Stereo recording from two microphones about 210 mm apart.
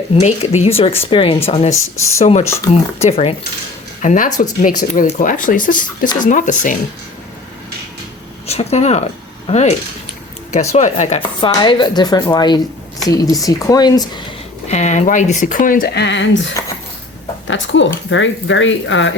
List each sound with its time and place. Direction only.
0.1 s speech: 30° left (ahead or behind)
1.7 s speech: 70° left (ahead or behind)
2.1 s speech: 30° left (ahead or behind)
8.4 s speech: 30° left (ahead or behind)
11.3 s speech: 25° left (ahead or behind)
14.7 s speech: 35° left (ahead or behind); by 16.4 s 60° left (ahead or behind)
17.5 s speech: 60° left (ahead or behind)